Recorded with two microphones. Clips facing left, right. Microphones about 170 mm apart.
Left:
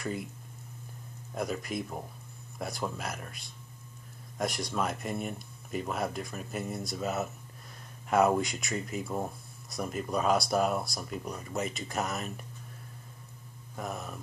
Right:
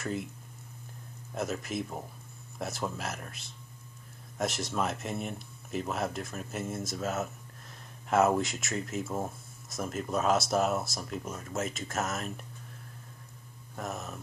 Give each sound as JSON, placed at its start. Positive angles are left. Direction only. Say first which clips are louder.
{"t": 0.0, "sound": "speech", "louder": "right 1 dB", "side_deg": 0}
{"t": 1.3, "sound": "speech", "louder": "even", "side_deg": 0}
{"t": 13.7, "sound": "speech", "louder": "even", "side_deg": 0}